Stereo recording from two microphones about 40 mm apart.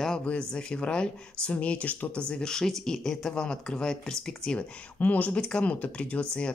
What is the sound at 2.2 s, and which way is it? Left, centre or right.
Speech, centre.